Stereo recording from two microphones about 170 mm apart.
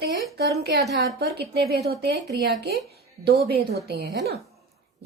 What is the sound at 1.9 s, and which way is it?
Speech, 80° right.